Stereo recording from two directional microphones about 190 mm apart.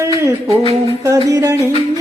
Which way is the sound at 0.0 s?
15° right (ahead or behind).